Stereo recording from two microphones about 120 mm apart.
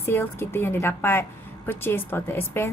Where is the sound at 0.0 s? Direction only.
20° left (ahead or behind).